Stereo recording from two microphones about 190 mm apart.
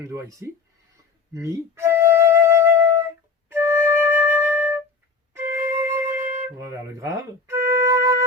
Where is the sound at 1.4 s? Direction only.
15° right (ahead or behind).